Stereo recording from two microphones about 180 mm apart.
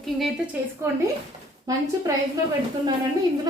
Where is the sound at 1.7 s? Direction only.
20° right (ahead or behind).